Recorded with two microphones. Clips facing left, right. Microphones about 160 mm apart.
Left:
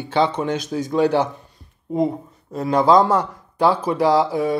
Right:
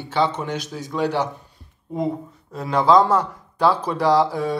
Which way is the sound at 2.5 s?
45° left (ahead or behind).